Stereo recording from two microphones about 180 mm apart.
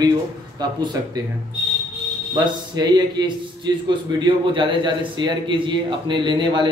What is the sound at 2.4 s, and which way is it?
A man's voice, 25° right (ahead or behind).